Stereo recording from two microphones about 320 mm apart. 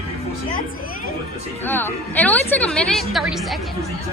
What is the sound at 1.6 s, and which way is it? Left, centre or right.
A woman's voice, centre.